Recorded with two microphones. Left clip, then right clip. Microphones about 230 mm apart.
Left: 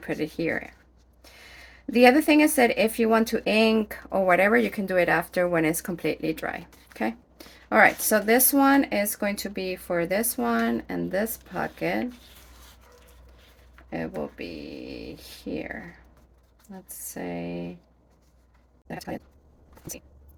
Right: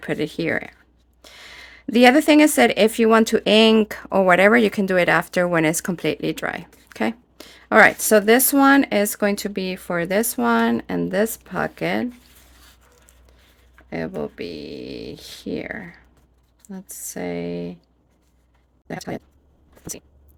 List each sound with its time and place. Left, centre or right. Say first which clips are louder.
0.0 s speech: right 4 dB; right
13.9 s speech: right 4 dB; right
18.9 s speech: right 5 dB; right